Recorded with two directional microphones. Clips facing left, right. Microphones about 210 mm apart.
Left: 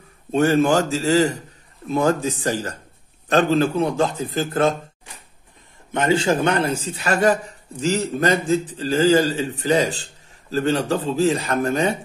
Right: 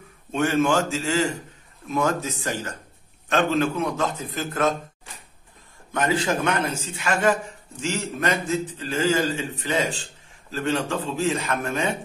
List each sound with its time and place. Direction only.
0.3 s a man's voice: 35° left (ahead or behind)
5.9 s a man's voice: 25° left (ahead or behind)